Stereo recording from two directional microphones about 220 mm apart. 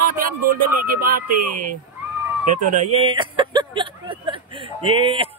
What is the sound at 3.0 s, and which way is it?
Speech, 20° right (ahead or behind).